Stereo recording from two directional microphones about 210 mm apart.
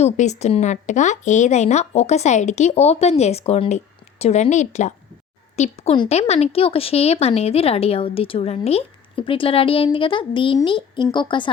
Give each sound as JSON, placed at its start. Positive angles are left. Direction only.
{"t": 0.0, "sound": "a woman's voice", "side_deg": 30}